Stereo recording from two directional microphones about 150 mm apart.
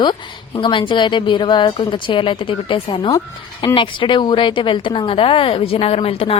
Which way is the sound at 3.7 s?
35° left (ahead or behind).